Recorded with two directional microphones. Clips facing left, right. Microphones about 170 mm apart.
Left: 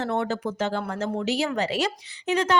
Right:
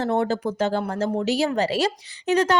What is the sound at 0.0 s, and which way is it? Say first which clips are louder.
Speech: right 4 dB; 35° right (ahead or behind).